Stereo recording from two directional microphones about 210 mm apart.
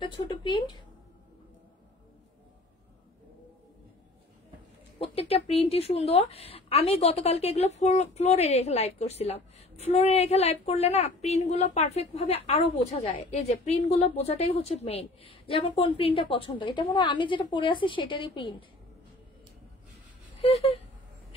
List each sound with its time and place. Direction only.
0.0 s speech: 20° left (ahead or behind)
5.0 s speech: 30° left (ahead or behind)
20.3 s speech: 30° left (ahead or behind)